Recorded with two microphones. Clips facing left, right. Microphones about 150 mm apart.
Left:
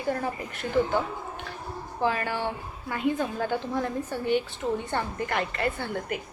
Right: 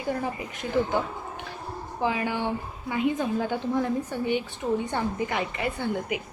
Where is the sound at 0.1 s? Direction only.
15° right (ahead or behind).